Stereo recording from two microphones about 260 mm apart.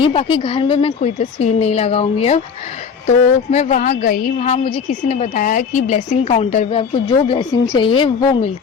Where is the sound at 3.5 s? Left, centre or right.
Left.